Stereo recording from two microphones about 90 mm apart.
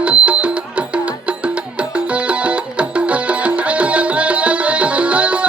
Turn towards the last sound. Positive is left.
turn(degrees=-15)  # may be behind; listen again after turning